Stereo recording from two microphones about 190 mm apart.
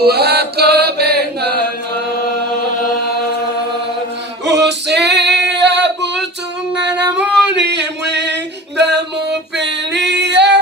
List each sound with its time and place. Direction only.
0.0 s chant: 55° right (ahead or behind)
4.4 s female singing: 65° right (ahead or behind)
7.5 s music: 65° right (ahead or behind)